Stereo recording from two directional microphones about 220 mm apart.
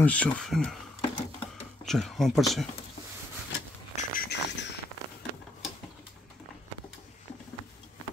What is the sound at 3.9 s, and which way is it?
Bird, 40° left (ahead or behind).